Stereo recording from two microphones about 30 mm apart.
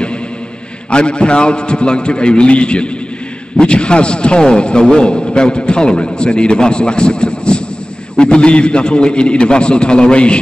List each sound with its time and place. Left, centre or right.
0.8 s a man's voice: left